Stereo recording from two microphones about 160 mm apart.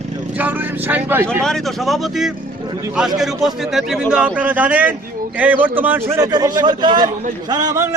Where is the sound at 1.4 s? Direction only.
Centre (ahead or behind).